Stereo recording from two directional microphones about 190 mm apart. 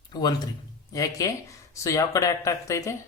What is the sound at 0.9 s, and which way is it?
Speech, 20° left (ahead or behind).